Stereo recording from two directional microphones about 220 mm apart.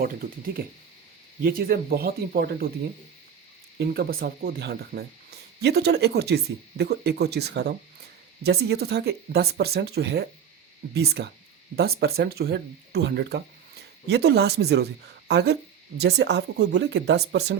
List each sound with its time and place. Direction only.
0.0 s speech: 40° right (ahead or behind)
3.8 s speech: 45° right (ahead or behind)